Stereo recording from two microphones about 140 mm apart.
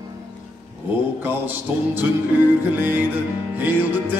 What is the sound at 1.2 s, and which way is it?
A man's voice, 15° right (ahead or behind).